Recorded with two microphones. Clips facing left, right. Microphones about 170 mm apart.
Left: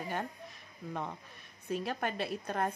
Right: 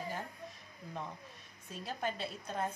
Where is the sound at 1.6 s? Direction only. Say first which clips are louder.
Left 5 dB; 65° left (ahead or behind).